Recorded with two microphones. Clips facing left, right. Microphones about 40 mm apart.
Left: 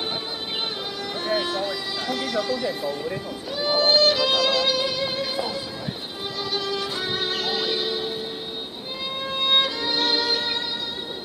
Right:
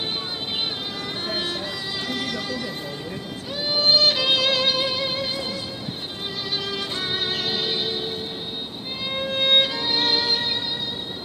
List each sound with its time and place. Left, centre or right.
1.2 s music: centre
3.6 s music: centre
9.1 s violin: right